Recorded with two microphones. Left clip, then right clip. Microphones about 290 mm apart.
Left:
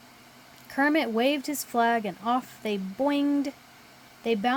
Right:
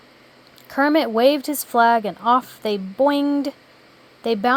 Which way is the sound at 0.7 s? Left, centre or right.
Centre.